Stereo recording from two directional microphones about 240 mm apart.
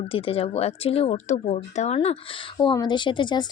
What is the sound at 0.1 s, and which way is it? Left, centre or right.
Speech, left.